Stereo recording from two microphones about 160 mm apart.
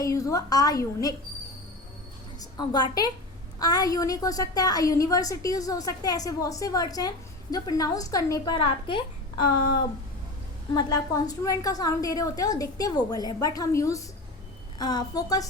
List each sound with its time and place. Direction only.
0.0 s a woman's voice: 20° left (ahead or behind)
2.4 s a woman's voice: 25° left (ahead or behind)
10.8 s a woman's voice: 25° left (ahead or behind)